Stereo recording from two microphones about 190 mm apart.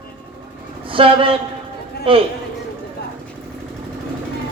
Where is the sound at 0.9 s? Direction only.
30° right (ahead or behind).